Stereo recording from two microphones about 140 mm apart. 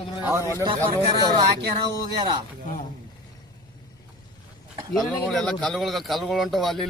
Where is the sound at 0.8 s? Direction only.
30° right (ahead or behind).